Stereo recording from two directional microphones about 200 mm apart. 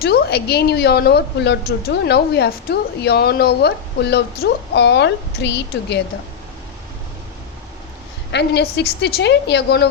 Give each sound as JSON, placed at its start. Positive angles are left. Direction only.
{"t": 0.0, "sound": "a woman's voice", "side_deg": 55}
{"t": 8.3, "sound": "a woman's voice", "side_deg": 60}